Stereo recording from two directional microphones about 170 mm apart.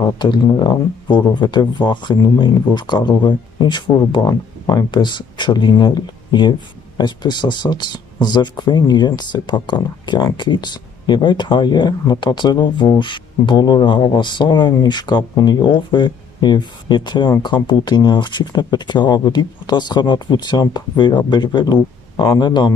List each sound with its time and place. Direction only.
0.0 s speech: 25° left (ahead or behind)